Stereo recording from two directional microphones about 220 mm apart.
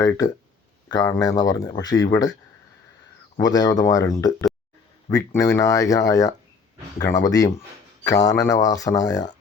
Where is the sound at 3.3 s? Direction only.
20° left (ahead or behind).